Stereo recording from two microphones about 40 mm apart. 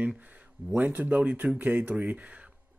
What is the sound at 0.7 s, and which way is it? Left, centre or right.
Speech, right.